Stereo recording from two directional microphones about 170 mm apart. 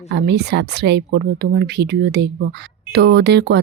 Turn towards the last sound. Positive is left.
turn(degrees=-75)  # may be behind; listen again after turning